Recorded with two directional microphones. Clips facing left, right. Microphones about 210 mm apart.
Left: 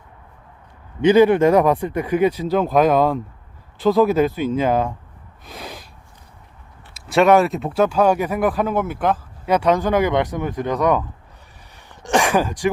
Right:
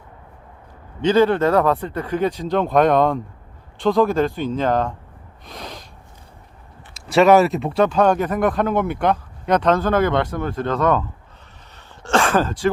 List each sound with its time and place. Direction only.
1.0 s speech: 10° left (ahead or behind)
5.5 s snort: 5° left (ahead or behind)
6.9 s speech: centre (ahead or behind); by 11.0 s 15° left (ahead or behind)
12.0 s speech: 15° left (ahead or behind)